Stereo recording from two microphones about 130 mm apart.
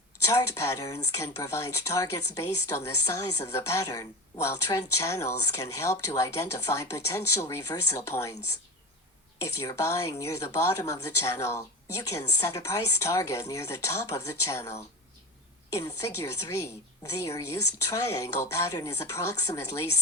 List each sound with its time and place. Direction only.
0.3 s speech: 25° left (ahead or behind)
9.4 s speech: 25° left (ahead or behind)